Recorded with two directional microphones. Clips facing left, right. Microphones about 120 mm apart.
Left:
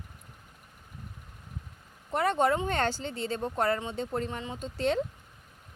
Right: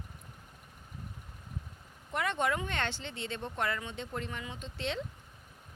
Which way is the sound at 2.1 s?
35° left (ahead or behind).